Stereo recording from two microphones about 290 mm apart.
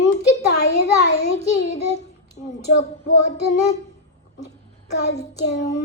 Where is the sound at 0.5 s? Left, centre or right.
Left.